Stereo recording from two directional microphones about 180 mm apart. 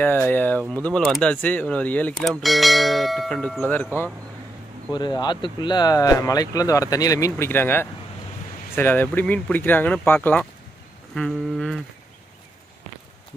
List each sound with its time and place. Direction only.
0.0 s speech: 10° left (ahead or behind)
4.9 s speech: 25° left (ahead or behind); by 11.8 s centre (ahead or behind)